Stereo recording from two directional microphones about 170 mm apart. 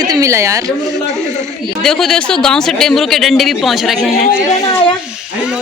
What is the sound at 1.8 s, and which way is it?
A man's voice, 5° left (ahead or behind).